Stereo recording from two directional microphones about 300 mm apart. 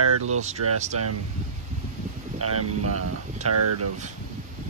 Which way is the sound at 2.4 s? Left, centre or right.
Right.